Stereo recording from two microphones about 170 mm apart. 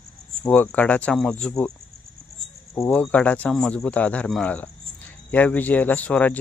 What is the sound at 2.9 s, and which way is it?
Speech, 5° left (ahead or behind).